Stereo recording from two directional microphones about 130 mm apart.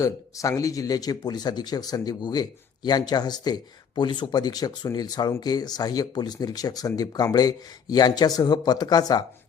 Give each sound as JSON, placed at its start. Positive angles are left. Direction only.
{"t": 0.0, "sound": "speech", "side_deg": 25}